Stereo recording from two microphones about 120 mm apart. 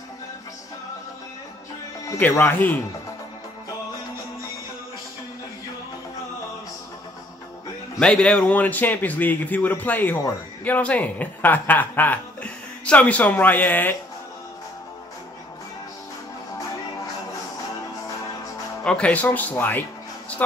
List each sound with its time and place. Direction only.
2.1 s a man's voice: 15° left (ahead or behind)
8.0 s a man's voice: 5° left (ahead or behind)
18.9 s a man's voice: 10° left (ahead or behind)